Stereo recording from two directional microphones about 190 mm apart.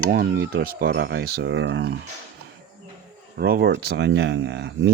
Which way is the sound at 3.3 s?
55° right (ahead or behind).